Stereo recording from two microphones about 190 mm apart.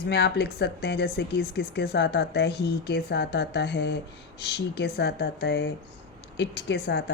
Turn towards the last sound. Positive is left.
turn(degrees=60)  # may be behind; listen again after turning